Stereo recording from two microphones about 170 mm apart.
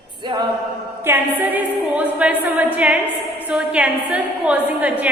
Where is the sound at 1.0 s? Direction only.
10° right (ahead or behind).